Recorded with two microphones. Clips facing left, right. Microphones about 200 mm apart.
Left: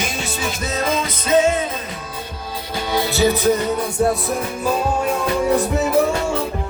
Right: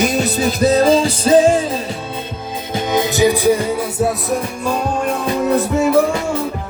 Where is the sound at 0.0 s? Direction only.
40° right (ahead or behind).